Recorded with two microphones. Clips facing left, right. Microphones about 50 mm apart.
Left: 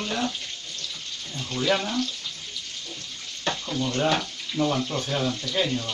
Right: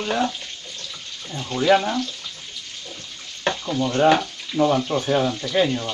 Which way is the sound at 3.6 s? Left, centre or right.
Right.